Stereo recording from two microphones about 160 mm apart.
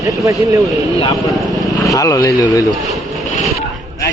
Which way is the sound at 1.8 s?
20° left (ahead or behind).